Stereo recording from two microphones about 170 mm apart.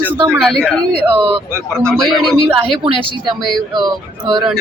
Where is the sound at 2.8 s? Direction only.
30° right (ahead or behind).